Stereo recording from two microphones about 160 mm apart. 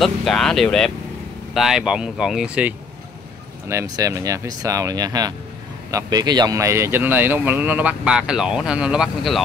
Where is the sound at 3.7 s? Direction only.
20° right (ahead or behind); by 9.4 s centre (ahead or behind).